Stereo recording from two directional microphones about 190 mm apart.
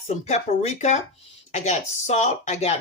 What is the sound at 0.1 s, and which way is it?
Speech, 35° left (ahead or behind).